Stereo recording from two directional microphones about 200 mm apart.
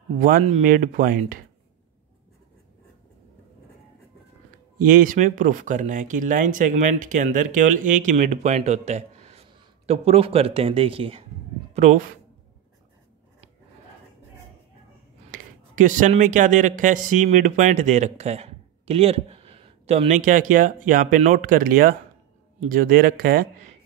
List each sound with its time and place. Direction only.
0.2 s speech: 40° right (ahead or behind)
4.8 s speech: 45° right (ahead or behind); by 11.2 s 30° right (ahead or behind)
11.7 s a sound: 35° right (ahead or behind)
15.3 s speech: 40° right (ahead or behind)